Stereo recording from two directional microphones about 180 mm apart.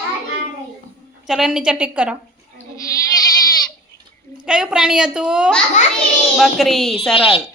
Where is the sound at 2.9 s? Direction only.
20° left (ahead or behind).